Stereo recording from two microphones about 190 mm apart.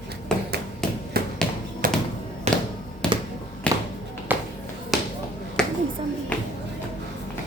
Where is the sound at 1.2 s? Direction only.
55° right (ahead or behind).